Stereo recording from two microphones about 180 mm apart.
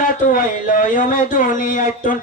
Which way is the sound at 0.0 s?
50° left (ahead or behind).